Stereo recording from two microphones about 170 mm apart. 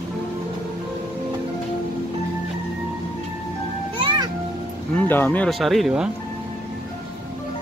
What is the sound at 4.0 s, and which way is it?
Music, 30° right (ahead or behind).